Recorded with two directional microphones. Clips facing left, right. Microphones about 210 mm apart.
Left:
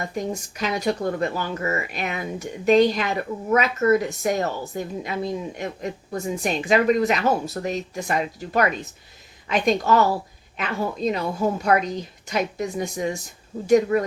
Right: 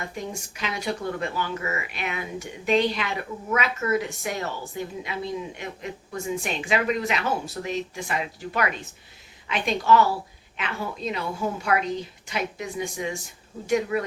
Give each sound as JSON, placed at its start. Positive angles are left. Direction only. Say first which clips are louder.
{"t": 0.0, "sound": "a woman's voice", "louder": "left 6 dB", "side_deg": 40}